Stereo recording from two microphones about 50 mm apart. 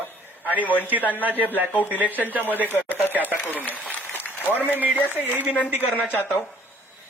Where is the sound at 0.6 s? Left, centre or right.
Left.